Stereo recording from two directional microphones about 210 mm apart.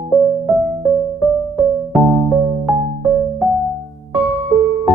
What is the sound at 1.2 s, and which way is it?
Music, centre (ahead or behind).